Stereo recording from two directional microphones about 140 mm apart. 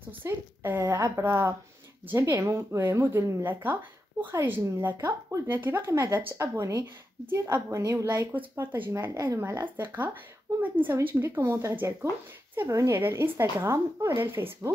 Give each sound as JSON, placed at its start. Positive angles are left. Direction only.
{"t": 0.2, "sound": "speech", "side_deg": -15}